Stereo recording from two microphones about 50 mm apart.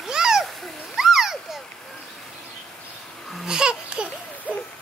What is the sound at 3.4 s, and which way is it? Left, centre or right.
Babbling, centre.